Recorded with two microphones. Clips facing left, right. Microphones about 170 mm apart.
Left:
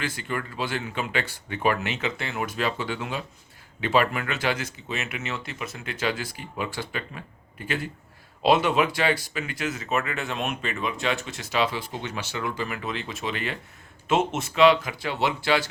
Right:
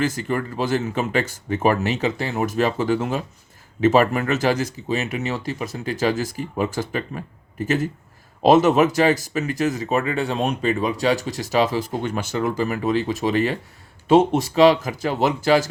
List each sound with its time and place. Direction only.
0.0 s speech: 40° right (ahead or behind)